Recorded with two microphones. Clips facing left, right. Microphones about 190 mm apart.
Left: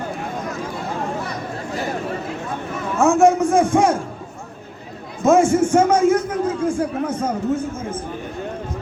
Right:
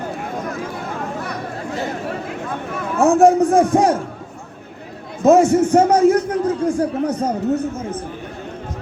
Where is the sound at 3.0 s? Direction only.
35° right (ahead or behind).